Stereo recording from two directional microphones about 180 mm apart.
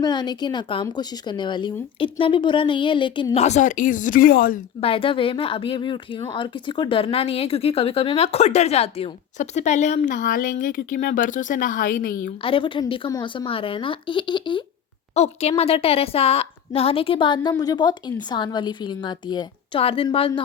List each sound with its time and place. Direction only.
0.0 s speech: 25° left (ahead or behind); by 4.6 s 55° left (ahead or behind)
4.8 s speech: 30° left (ahead or behind); by 12.3 s 50° left (ahead or behind)
12.4 s speech: 30° left (ahead or behind)